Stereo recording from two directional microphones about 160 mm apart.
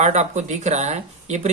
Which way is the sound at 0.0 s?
45° right (ahead or behind).